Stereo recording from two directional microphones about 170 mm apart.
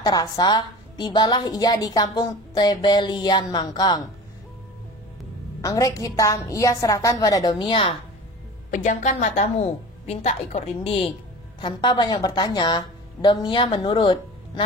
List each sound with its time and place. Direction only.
0.0 s a woman's voice: 25° left (ahead or behind)
5.6 s a woman's voice: 20° left (ahead or behind)
8.6 s a woman's voice: 45° left (ahead or behind); by 14.6 s 25° left (ahead or behind)